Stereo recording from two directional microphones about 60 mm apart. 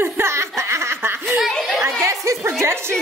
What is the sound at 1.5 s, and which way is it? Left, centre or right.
Speech, centre.